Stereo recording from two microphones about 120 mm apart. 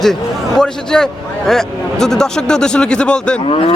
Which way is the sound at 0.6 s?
5° left (ahead or behind).